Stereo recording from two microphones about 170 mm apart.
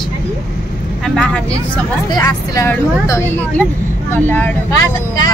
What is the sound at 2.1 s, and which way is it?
Speech, 20° left (ahead or behind).